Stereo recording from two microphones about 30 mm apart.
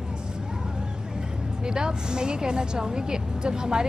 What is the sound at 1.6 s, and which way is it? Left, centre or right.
A woman's voice, right.